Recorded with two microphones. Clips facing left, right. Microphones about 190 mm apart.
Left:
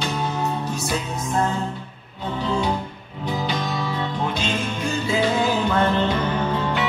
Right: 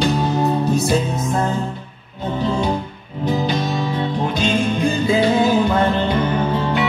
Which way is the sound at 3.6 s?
20° right (ahead or behind).